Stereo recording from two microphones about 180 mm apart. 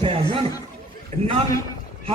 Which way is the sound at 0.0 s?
30° right (ahead or behind).